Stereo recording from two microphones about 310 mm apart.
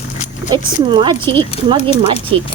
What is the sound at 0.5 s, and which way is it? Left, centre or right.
Speech, centre.